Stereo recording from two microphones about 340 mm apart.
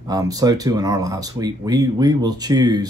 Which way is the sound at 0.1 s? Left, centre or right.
Centre.